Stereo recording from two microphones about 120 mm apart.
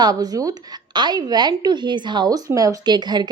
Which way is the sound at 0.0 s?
30° right (ahead or behind).